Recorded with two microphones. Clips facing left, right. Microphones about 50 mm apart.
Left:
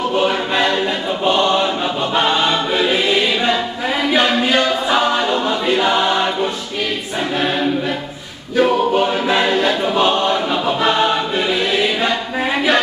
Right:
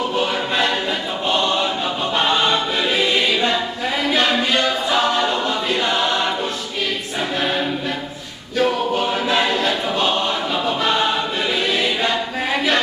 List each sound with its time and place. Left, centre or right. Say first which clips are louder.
1.2 s choir: left 5 dB; centre
4.1 s music: left 3 dB; centre
5.8 s choir: left 4 dB; centre
8.5 s choir: left 4 dB; centre